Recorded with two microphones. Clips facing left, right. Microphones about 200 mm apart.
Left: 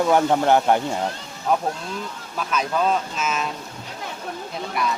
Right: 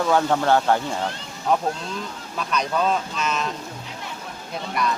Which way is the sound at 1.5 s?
5° left (ahead or behind).